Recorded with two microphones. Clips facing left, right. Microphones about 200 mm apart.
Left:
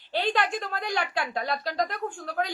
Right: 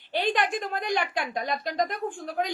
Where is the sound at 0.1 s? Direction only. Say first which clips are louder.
Right 1 dB; 15° right (ahead or behind).